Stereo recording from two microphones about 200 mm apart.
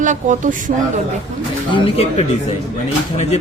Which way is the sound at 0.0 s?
40° right (ahead or behind).